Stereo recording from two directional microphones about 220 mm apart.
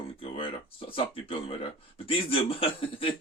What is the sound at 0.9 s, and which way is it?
Speech, 25° left (ahead or behind).